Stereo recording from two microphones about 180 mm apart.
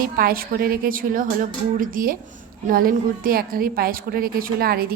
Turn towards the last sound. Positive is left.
turn(degrees=-55)  # may be behind; listen again after turning